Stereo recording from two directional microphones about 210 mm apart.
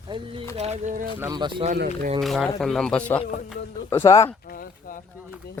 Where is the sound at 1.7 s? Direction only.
40° right (ahead or behind).